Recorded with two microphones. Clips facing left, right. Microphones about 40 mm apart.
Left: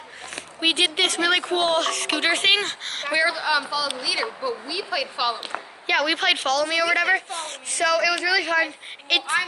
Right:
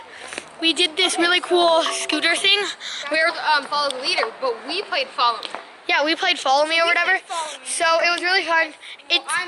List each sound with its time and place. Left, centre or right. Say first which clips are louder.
0.6 s speech: right 1 dB; centre
3.3 s a woman's voice: right 3 dB; right
5.9 s speech: right 2 dB; centre
6.6 s speech: right 3 dB; centre